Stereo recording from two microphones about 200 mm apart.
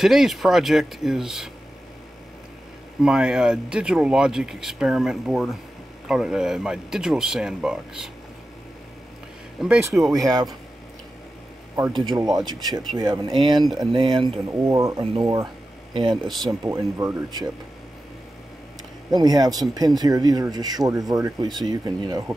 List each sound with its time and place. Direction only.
0.0 s speech: centre (ahead or behind)
3.0 s speech: 5° right (ahead or behind)
9.6 s speech: centre (ahead or behind)
10.2 s speech: 20° right (ahead or behind)
11.7 s speech: 20° right (ahead or behind)
16.3 s speech: centre (ahead or behind)
16.6 s speech: 15° right (ahead or behind)
19.0 s speech: 20° right (ahead or behind)